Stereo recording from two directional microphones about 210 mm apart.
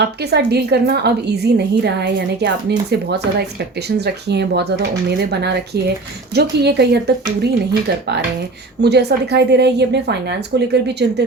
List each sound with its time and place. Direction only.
0.0 s a woman's voice: 50° right (ahead or behind)